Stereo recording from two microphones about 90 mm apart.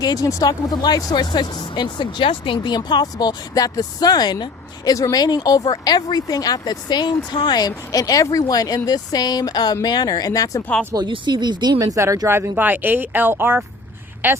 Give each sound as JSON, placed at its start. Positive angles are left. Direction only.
{"t": 0.0, "sound": "speech", "side_deg": 40}
{"t": 0.7, "sound": "speech", "side_deg": 50}
{"t": 7.9, "sound": "speech", "side_deg": 40}
{"t": 10.9, "sound": "speech", "side_deg": -40}
{"t": 11.3, "sound": "speech", "side_deg": -55}
{"t": 12.3, "sound": "speech", "side_deg": -25}